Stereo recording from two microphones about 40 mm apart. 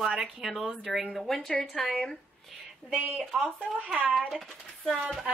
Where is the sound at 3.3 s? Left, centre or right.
Centre.